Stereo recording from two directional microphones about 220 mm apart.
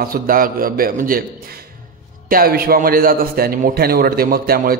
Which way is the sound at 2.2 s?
40° right (ahead or behind).